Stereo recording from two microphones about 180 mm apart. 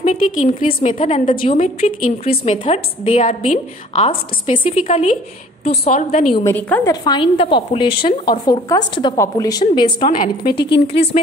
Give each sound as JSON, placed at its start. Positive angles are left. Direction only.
{"t": 0.0, "sound": "a woman's voice", "side_deg": 40}
{"t": 6.5, "sound": "a woman's voice", "side_deg": 10}
{"t": 6.9, "sound": "a woman's voice", "side_deg": 25}
{"t": 10.0, "sound": "a woman's voice", "side_deg": 45}
{"t": 10.5, "sound": "speech", "side_deg": 65}